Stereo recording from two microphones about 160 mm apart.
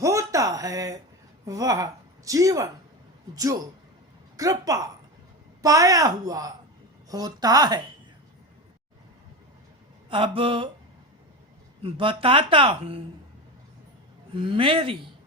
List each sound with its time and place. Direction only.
0.0 s a sound: 20° right (ahead or behind)
1.5 s speech: 20° right (ahead or behind)
10.1 s speech: 35° right (ahead or behind)
11.8 s speech: 35° right (ahead or behind)
14.3 s speech: 35° right (ahead or behind)